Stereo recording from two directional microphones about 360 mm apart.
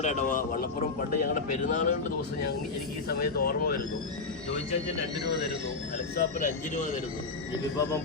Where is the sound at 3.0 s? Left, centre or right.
Left.